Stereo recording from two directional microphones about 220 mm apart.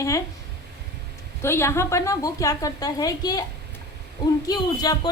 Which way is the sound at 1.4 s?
10° left (ahead or behind).